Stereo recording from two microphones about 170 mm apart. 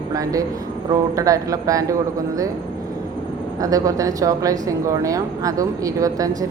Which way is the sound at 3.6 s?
20° right (ahead or behind).